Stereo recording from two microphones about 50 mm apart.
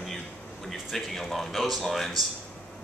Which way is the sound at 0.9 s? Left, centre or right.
Centre.